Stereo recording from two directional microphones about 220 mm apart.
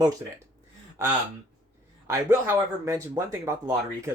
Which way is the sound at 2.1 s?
10° right (ahead or behind).